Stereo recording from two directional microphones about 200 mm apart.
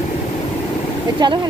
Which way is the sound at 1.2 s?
20° right (ahead or behind).